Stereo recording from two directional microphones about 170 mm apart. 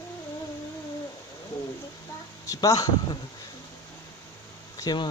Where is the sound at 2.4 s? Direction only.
20° left (ahead or behind).